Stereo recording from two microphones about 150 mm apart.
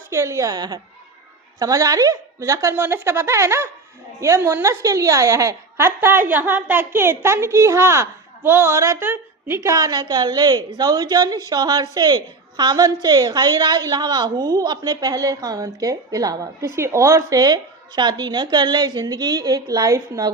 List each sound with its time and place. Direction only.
0.1 s a woman's voice: 20° right (ahead or behind)